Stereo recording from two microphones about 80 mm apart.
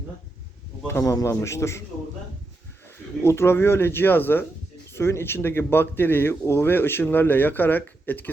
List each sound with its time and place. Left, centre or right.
1.0 s a man's voice: left
3.2 s speech: left